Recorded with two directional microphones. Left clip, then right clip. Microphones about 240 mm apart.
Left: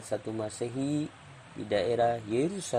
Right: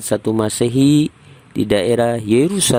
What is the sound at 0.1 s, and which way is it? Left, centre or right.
Speech, right.